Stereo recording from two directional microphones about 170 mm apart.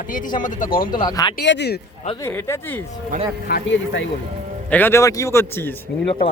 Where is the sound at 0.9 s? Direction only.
25° left (ahead or behind).